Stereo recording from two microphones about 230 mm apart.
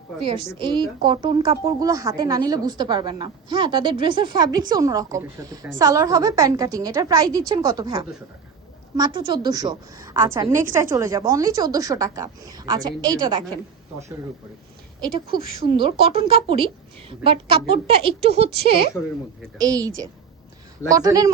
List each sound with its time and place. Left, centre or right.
0.2 s speech: right
15.4 s speech: right